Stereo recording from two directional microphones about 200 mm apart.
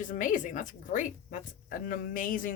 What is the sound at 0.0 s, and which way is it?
Speech, 40° left (ahead or behind).